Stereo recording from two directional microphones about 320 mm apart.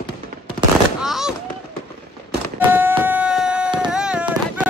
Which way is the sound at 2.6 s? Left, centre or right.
Centre.